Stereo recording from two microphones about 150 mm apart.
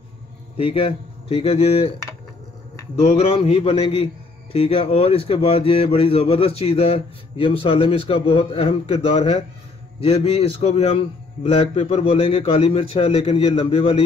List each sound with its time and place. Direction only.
0.6 s a man's voice: 40° left (ahead or behind)
3.0 s a man's voice: 40° left (ahead or behind)